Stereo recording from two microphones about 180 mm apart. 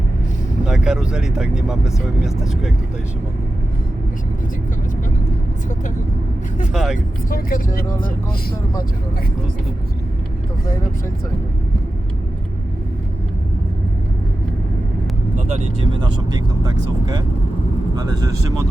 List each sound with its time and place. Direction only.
0.6 s speech: 5° right (ahead or behind)
6.7 s speech: 5° right (ahead or behind)
7.3 s speech: 50° left (ahead or behind)
15.4 s speech: 35° right (ahead or behind)